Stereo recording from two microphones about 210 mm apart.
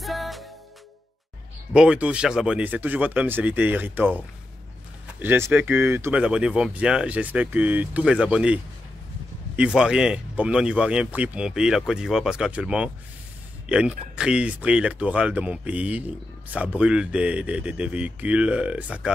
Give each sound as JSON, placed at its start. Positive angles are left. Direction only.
{"t": 0.0, "sound": "music", "side_deg": 0}
{"t": 1.7, "sound": "speech", "side_deg": -5}
{"t": 5.2, "sound": "speech", "side_deg": -10}
{"t": 9.6, "sound": "speech", "side_deg": -5}